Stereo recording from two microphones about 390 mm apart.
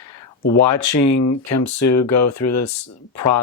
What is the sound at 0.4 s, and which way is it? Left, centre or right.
Speech, left.